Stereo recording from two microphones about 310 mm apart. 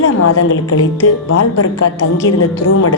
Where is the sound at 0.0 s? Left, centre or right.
Left.